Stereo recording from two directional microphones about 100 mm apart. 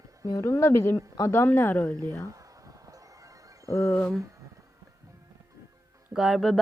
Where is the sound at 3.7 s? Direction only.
25° left (ahead or behind).